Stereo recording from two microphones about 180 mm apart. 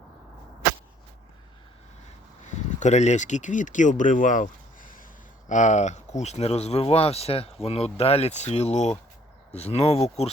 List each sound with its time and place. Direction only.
2.5 s speech: 40° left (ahead or behind)